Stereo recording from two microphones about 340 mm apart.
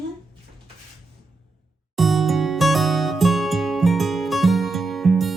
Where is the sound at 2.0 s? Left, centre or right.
Centre.